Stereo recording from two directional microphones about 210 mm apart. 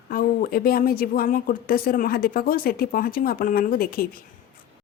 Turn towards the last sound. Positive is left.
turn(degrees=45)  # may be behind; listen again after turning